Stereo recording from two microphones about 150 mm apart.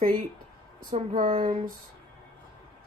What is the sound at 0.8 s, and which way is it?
Speech, 65° right (ahead or behind).